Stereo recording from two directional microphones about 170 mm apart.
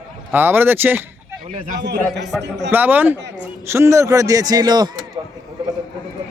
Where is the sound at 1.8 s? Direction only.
85° right.